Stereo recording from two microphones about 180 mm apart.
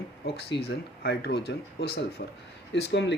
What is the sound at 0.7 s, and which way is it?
Speech, 60° left (ahead or behind).